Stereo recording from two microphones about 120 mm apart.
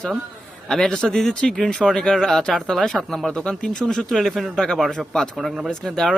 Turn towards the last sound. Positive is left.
turn(degrees=5)  # may be behind; listen again after turning